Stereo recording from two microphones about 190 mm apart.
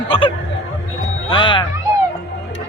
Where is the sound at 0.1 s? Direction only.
25° left (ahead or behind).